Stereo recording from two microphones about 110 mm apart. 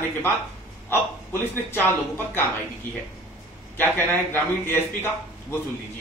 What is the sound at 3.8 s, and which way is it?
Speech, 20° left (ahead or behind).